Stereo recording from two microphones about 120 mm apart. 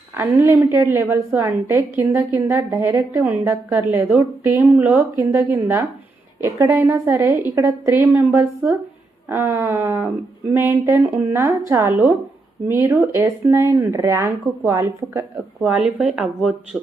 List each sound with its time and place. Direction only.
0.1 s a woman's voice: 20° right (ahead or behind)
15.6 s speech: 10° right (ahead or behind)